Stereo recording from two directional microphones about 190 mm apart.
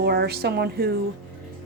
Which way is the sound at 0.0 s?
55° right (ahead or behind).